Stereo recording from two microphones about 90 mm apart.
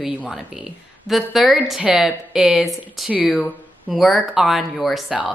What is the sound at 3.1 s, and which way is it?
Speech, 15° right (ahead or behind).